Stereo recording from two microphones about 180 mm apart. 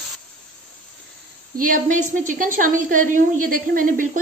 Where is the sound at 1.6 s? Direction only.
45° right (ahead or behind).